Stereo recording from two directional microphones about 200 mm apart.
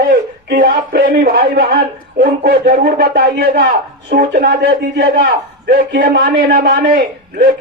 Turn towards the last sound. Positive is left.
turn(degrees=-45)  # may be behind; listen again after turning